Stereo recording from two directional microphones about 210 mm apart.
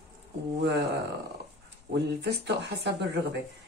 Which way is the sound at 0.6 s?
55° right (ahead or behind).